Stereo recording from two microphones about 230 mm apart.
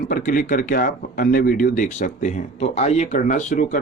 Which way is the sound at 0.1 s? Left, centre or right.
Left.